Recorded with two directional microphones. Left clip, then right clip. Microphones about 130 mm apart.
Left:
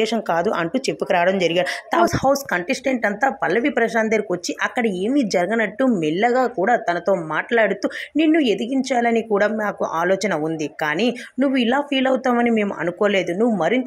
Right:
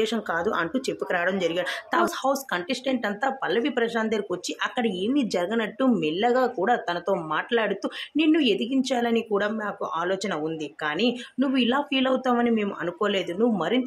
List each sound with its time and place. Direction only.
0.0 s speech: 35° left (ahead or behind)